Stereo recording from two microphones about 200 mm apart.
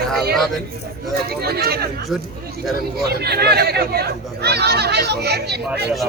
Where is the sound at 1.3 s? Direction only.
50° right (ahead or behind).